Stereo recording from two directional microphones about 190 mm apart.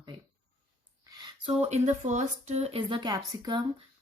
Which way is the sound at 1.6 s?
35° right (ahead or behind).